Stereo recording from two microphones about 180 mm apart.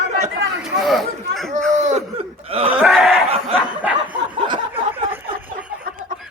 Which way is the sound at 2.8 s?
Centre (ahead or behind).